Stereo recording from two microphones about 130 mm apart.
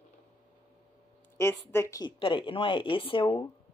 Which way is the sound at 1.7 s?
20° left (ahead or behind).